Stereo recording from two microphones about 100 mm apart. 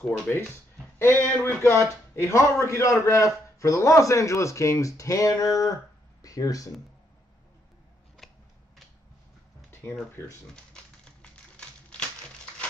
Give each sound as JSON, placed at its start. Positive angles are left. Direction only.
{"t": 0.3, "sound": "speech", "side_deg": 15}
{"t": 0.9, "sound": "a man's voice", "side_deg": 25}
{"t": 10.2, "sound": "speech", "side_deg": 30}
{"t": 10.5, "sound": "a sound", "side_deg": 10}